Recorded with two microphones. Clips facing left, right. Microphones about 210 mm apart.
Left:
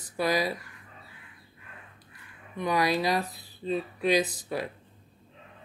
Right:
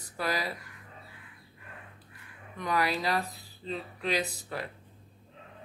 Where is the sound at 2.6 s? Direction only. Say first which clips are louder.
Left 4 dB; 15° left (ahead or behind).